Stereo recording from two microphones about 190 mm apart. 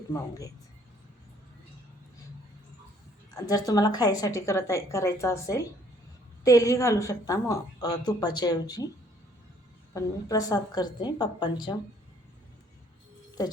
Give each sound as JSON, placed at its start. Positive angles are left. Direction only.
{"t": 0.1, "sound": "speech", "side_deg": 20}
{"t": 3.3, "sound": "a woman's voice", "side_deg": 20}
{"t": 9.9, "sound": "a woman's voice", "side_deg": 20}